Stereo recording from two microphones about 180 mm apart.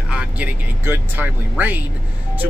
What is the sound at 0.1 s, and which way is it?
Speech, 10° right (ahead or behind).